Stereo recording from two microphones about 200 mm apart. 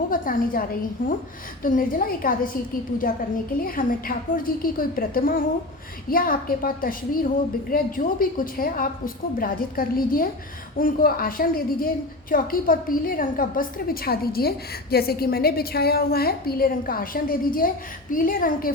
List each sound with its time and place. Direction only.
0.1 s a woman's voice: 45° left (ahead or behind)
3.6 s a woman's voice: 45° left (ahead or behind)